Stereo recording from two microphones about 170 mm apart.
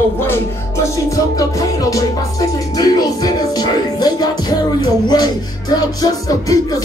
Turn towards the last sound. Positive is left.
turn(degrees=20)  # may be behind; listen again after turning